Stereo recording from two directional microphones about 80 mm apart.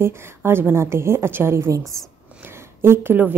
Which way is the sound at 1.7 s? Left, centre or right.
Right.